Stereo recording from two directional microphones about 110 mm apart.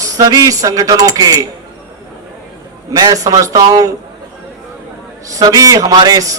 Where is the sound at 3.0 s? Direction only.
35° right (ahead or behind).